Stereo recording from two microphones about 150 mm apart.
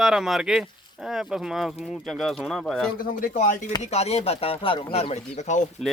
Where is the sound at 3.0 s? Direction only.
65° left (ahead or behind).